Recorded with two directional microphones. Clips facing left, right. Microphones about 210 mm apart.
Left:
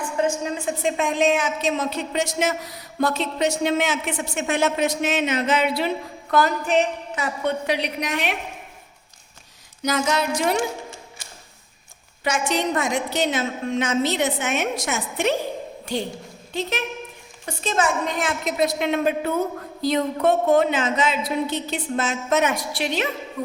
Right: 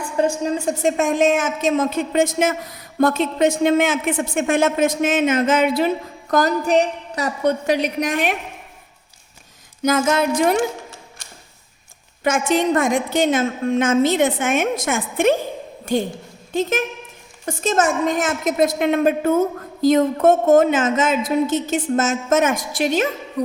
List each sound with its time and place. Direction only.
0.2 s a woman's voice: 35° right (ahead or behind)
9.8 s a woman's voice: 50° right (ahead or behind)
12.2 s a woman's voice: 50° right (ahead or behind)